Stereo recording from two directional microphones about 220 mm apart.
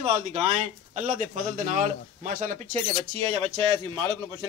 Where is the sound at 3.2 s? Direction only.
25° right (ahead or behind).